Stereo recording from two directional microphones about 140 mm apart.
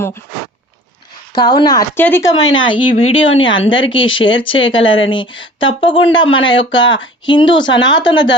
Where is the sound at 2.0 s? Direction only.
15° left (ahead or behind).